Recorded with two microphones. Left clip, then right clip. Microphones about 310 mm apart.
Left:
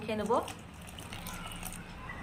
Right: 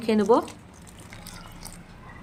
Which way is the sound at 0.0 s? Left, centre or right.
Right.